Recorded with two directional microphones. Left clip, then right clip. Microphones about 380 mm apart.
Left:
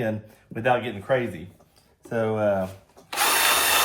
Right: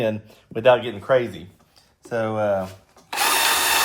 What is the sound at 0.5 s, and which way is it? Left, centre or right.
Speech, right.